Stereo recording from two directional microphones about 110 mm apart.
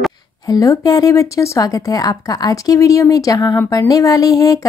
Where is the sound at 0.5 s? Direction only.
30° left (ahead or behind).